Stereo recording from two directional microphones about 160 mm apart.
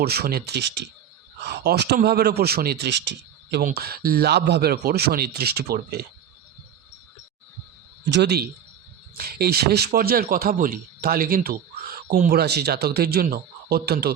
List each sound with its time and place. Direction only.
0.0 s speech: 80° right
3.8 s speech: 80° right
8.1 s speech: 90° right
9.1 s speech: 75° right (ahead or behind)